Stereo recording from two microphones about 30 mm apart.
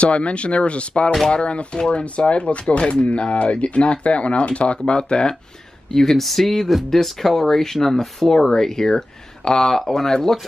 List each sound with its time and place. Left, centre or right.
0.0 s speech: left
5.9 s speech: centre